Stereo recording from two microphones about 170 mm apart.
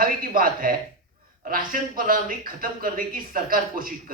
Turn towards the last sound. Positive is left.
turn(degrees=-55)  # may be behind; listen again after turning